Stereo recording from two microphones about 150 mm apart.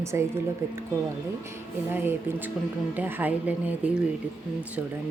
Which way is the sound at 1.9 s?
15° right (ahead or behind).